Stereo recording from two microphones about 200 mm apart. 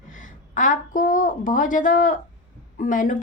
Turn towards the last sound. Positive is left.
turn(degrees=40)  # may be behind; listen again after turning